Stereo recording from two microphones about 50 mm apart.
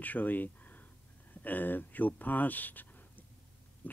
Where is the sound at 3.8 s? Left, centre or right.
Left.